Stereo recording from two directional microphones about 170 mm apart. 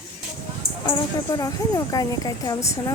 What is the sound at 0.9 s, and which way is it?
Speech, 25° left (ahead or behind).